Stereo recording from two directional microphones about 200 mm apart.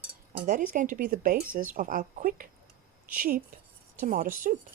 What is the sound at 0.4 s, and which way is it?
Speech, 40° right (ahead or behind).